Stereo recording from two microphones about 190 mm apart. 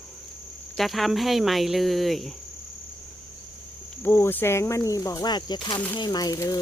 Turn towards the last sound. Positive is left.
turn(degrees=20)  # may be behind; listen again after turning